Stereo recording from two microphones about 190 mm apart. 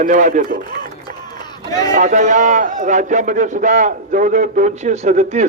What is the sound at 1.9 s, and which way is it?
A man's voice, 40° right (ahead or behind).